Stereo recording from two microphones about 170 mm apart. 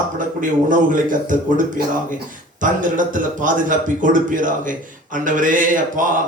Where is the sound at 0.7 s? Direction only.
50° right (ahead or behind).